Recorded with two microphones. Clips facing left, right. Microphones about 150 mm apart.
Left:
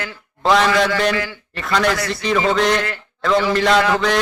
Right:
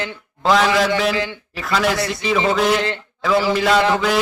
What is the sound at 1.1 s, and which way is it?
Speech, 20° right (ahead or behind).